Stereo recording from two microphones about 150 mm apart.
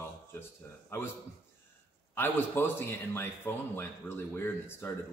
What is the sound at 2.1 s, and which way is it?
A man's voice, 15° left (ahead or behind).